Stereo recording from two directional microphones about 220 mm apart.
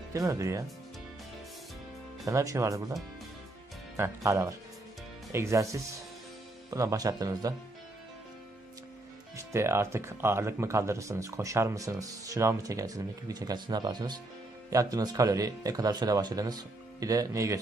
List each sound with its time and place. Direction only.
0.1 s speech: 15° right (ahead or behind)
2.2 s speech: 15° right (ahead or behind)
3.9 s speech: 10° right (ahead or behind)
9.4 s speech: 10° right (ahead or behind)